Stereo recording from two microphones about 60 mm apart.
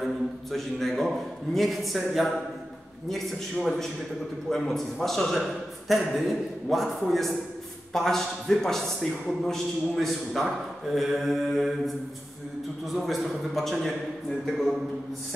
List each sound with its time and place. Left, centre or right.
0.0 s a man's voice: centre
3.6 s a man's voice: centre
12.9 s a man's voice: centre